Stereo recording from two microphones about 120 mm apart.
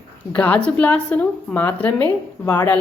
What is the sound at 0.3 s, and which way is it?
A woman's voice, 10° left (ahead or behind).